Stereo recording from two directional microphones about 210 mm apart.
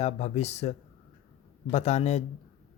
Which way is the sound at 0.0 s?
30° left (ahead or behind).